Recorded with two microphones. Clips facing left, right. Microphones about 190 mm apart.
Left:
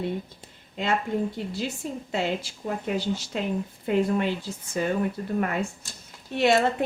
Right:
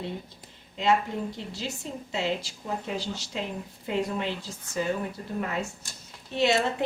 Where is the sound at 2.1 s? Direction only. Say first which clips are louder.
Left 1 dB; 55° left (ahead or behind).